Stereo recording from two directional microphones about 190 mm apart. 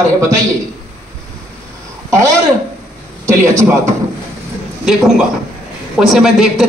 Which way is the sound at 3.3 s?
15° right (ahead or behind).